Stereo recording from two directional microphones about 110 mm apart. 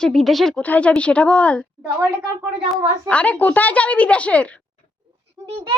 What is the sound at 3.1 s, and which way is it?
A woman's voice, 10° left (ahead or behind).